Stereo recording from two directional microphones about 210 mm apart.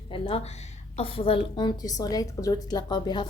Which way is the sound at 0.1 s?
25° left (ahead or behind).